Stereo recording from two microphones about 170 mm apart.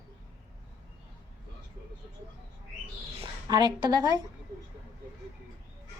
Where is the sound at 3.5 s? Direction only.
25° right (ahead or behind).